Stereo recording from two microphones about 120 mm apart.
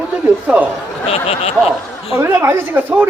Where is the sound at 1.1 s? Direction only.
55° left (ahead or behind).